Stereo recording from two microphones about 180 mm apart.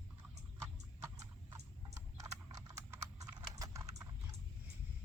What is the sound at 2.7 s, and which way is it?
Typing, 20° right (ahead or behind).